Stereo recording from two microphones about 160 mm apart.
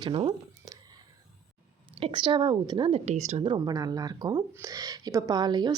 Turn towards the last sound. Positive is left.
turn(degrees=-25)  # may be behind; listen again after turning